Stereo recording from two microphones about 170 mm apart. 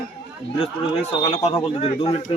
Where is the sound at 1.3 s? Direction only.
30° left (ahead or behind).